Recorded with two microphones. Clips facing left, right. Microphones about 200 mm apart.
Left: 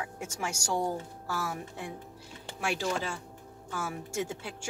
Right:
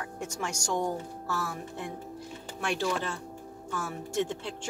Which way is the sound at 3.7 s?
10° left (ahead or behind).